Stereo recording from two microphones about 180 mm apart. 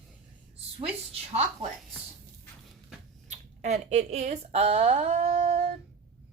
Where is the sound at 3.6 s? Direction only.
35° right (ahead or behind).